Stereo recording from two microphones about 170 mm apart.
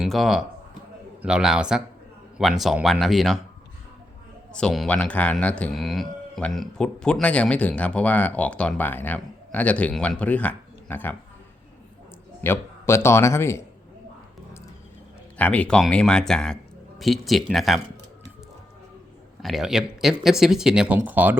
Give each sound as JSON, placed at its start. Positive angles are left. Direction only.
{"t": 0.0, "sound": "speech", "side_deg": 0}
{"t": 4.5, "sound": "speech", "side_deg": 5}
{"t": 12.4, "sound": "speech", "side_deg": 15}
{"t": 15.4, "sound": "speech", "side_deg": 10}
{"t": 19.4, "sound": "speech", "side_deg": 0}